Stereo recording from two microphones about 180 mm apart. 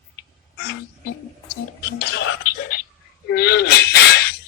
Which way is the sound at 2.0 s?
75° left (ahead or behind).